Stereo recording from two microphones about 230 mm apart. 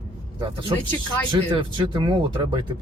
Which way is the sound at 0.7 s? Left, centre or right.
Right.